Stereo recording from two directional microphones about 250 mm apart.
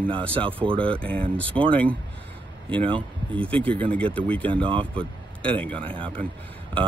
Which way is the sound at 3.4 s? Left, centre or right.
Centre.